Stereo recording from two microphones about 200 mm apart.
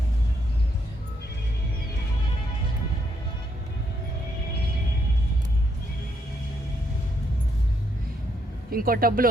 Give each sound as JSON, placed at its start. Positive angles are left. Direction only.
{"t": 8.7, "sound": "a man's voice", "side_deg": -45}